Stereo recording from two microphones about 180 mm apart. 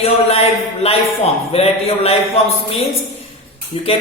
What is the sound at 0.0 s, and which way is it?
Speech, 35° left (ahead or behind).